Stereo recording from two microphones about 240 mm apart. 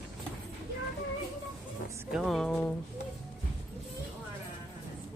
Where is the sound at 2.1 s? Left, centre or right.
Centre.